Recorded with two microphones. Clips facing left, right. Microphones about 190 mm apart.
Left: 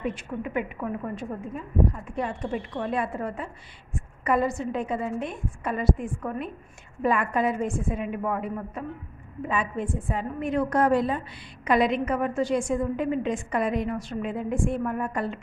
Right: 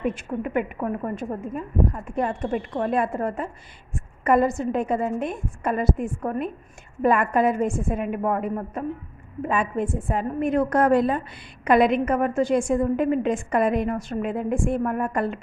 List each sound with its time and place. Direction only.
0.0 s a woman's voice: 50° right (ahead or behind)